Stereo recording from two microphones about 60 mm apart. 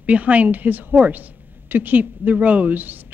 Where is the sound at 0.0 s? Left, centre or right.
Right.